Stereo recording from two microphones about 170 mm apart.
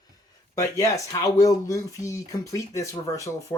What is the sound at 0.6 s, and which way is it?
Speech, 20° left (ahead or behind).